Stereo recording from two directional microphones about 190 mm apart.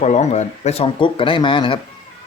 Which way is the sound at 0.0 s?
35° left (ahead or behind).